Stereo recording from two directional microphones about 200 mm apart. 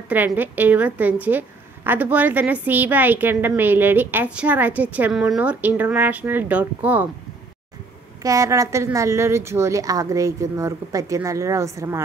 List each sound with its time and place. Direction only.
0.1 s a woman's voice: 10° right (ahead or behind)
8.2 s a woman's voice: 15° right (ahead or behind)